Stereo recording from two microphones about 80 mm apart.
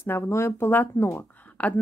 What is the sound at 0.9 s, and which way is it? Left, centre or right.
Speech, left.